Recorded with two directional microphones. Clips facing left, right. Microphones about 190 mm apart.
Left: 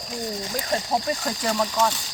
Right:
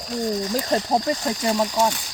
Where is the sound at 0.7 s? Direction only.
25° right (ahead or behind).